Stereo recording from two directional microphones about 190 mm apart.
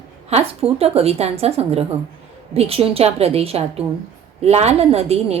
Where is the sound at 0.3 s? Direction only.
35° right (ahead or behind).